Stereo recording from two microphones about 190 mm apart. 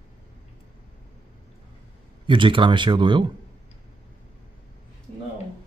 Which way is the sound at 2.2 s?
25° right (ahead or behind).